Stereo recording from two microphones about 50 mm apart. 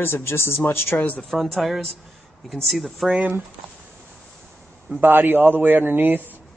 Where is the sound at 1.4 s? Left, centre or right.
Centre.